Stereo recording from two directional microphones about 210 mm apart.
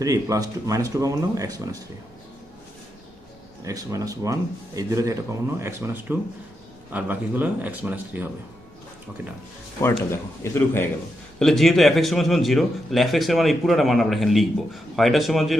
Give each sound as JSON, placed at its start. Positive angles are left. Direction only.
{"t": 0.0, "sound": "speech", "side_deg": -15}
{"t": 3.6, "sound": "speech", "side_deg": -15}
{"t": 10.1, "sound": "a man's voice", "side_deg": 10}
{"t": 11.3, "sound": "a man's voice", "side_deg": 0}